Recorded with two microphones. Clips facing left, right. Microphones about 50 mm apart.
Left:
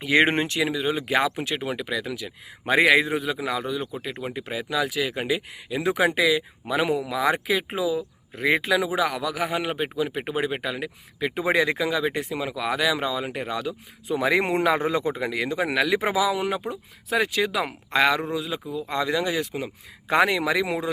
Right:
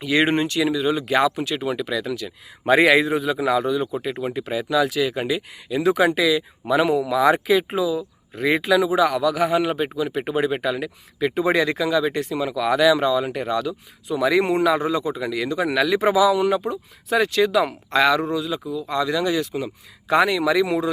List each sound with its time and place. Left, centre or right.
0.0 s speech: left
0.6 s speech: centre
1.6 s speech: centre
2.6 s speech: centre
14.1 s speech: left